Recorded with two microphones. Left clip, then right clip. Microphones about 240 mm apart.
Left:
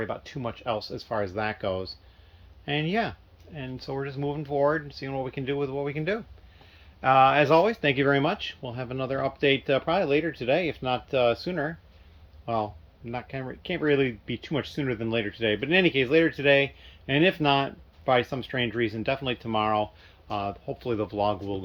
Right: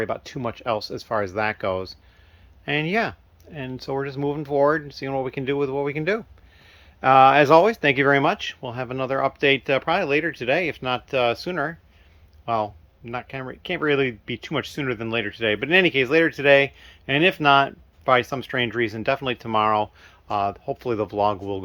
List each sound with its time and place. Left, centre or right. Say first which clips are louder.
0.0 s speech: right 5 dB; right